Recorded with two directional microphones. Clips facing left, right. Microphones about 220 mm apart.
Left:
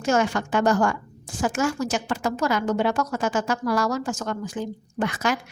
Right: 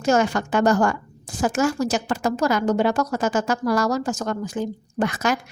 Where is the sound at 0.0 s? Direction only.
40° right (ahead or behind).